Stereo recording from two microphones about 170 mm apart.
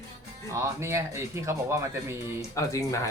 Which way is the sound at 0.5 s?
15° right (ahead or behind).